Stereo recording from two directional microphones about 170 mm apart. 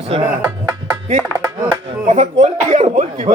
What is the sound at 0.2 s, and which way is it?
Speech, 15° right (ahead or behind).